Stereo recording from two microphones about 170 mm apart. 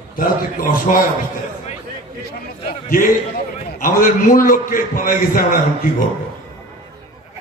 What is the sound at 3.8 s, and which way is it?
A man's voice, 55° left (ahead or behind).